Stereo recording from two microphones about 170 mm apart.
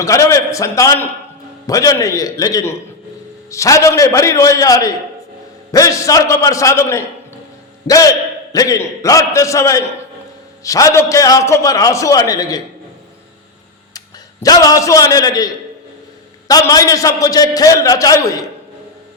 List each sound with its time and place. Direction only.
0.0 s a man's voice: 20° left (ahead or behind)
14.4 s a man's voice: 20° left (ahead or behind)